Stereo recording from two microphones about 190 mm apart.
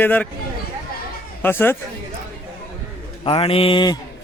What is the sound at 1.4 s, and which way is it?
Speech, 10° left (ahead or behind).